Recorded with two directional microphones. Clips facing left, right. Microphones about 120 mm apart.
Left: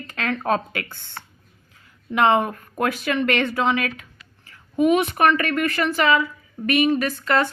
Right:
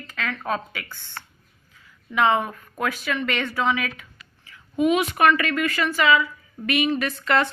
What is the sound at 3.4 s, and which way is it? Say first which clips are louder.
Speech: left 3 dB; 20° left (ahead or behind).